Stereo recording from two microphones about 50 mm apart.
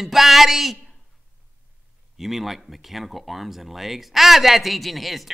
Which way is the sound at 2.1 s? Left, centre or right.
Centre.